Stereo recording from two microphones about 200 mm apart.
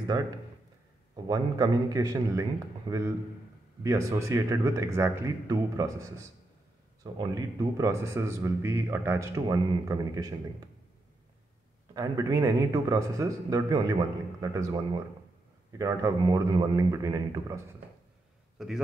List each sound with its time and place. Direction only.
1.1 s a man's voice: 20° right (ahead or behind)
7.0 s a man's voice: 15° right (ahead or behind)
11.9 s a man's voice: 15° right (ahead or behind)
18.6 s a man's voice: centre (ahead or behind)